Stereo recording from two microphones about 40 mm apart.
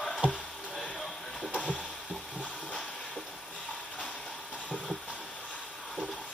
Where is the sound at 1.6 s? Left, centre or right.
Left.